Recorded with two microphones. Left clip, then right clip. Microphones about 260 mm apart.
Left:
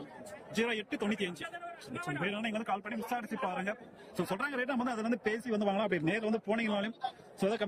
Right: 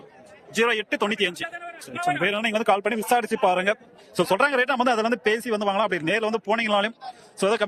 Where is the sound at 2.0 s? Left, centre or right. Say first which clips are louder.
Right 14 dB; right.